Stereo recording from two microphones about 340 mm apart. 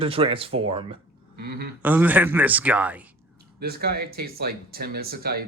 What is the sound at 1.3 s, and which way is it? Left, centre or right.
Speech, right.